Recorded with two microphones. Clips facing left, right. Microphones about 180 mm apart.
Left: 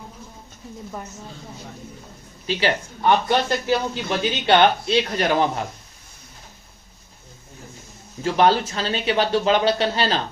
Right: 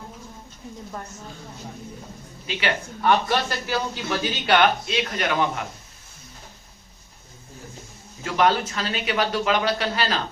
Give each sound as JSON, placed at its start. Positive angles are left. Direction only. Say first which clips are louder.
{"t": 2.5, "sound": "speech", "louder": "left 4 dB", "side_deg": 30}
{"t": 8.2, "sound": "speech", "louder": "left 3 dB", "side_deg": 30}